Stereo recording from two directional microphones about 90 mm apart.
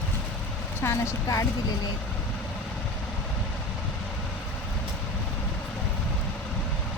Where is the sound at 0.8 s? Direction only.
35° left (ahead or behind).